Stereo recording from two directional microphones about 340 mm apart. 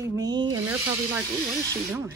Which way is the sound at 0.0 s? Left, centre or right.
Centre.